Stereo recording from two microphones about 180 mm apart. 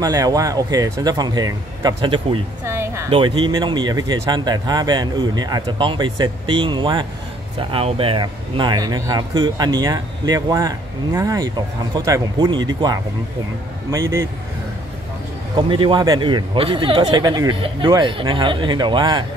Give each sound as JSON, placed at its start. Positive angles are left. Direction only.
{"t": 0.0, "sound": "speech", "side_deg": -20}
{"t": 2.6, "sound": "speech", "side_deg": -15}
{"t": 3.1, "sound": "speech", "side_deg": -30}
{"t": 15.5, "sound": "speech", "side_deg": -25}